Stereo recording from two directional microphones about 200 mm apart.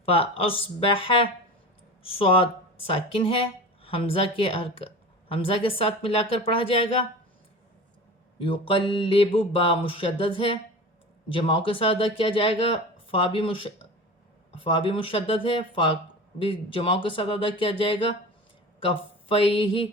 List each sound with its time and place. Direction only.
0.0 s speech: 30° left (ahead or behind)
8.4 s speech: 25° left (ahead or behind)